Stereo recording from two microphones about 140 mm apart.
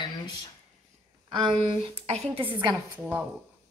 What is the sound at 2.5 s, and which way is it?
Speech, 35° right (ahead or behind).